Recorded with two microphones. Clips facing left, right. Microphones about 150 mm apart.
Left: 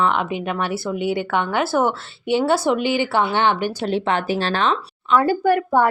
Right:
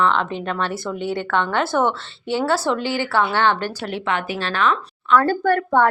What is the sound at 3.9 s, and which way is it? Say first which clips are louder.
Speech: left 4 dB; 30° left (ahead or behind).